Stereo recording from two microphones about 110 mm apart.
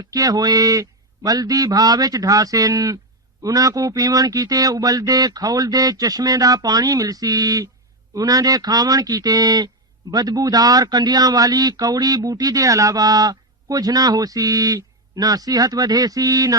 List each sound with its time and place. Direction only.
0.1 s speech: 35° right (ahead or behind)